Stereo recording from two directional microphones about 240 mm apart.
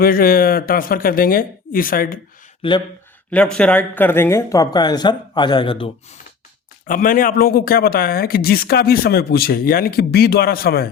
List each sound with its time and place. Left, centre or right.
0.0 s speech: left
2.6 s speech: centre
3.3 s speech: centre; by 5.9 s left
6.8 s speech: left